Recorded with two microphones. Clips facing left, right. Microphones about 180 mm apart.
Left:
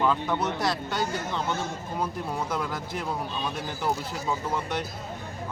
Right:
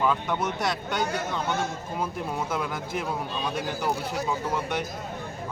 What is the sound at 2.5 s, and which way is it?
Speech, 5° right (ahead or behind).